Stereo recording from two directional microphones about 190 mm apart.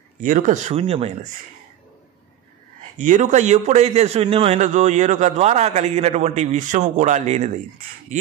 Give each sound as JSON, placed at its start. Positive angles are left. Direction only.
{"t": 0.2, "sound": "a man's voice", "side_deg": -45}
{"t": 3.0, "sound": "a man's voice", "side_deg": -40}